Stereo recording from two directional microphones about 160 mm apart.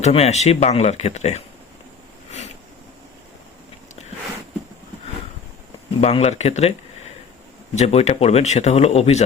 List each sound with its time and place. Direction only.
0.0 s speech: 45° left (ahead or behind)
6.0 s speech: 40° left (ahead or behind)
7.8 s speech: 40° left (ahead or behind)